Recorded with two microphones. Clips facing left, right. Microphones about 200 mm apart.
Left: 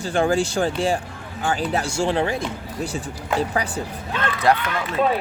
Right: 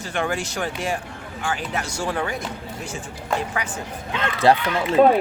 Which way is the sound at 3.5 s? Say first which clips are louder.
Left 4 dB; 35° left (ahead or behind).